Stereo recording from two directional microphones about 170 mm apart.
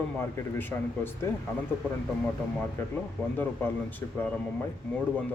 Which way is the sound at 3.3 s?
10° left (ahead or behind).